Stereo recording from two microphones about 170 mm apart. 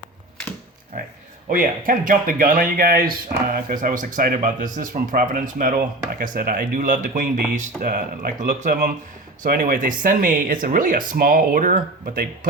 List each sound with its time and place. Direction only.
1.5 s speech: 55° right (ahead or behind)